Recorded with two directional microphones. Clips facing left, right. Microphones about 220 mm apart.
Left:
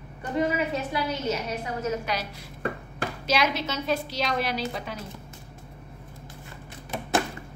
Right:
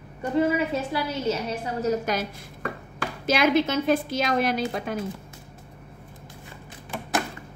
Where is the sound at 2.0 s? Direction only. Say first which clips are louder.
Right 4 dB; 45° right (ahead or behind).